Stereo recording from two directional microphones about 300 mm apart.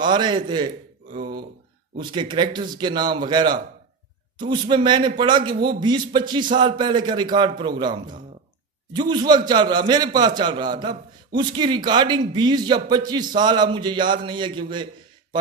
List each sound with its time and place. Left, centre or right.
0.0 s a man's voice: centre
1.1 s a sound: right
2.0 s a man's voice: centre